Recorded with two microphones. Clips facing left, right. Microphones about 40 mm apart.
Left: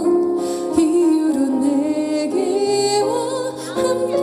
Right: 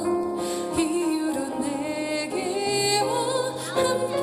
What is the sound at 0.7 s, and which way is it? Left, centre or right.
Music, right.